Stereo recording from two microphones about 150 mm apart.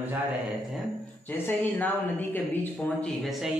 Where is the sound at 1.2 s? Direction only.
15° left (ahead or behind).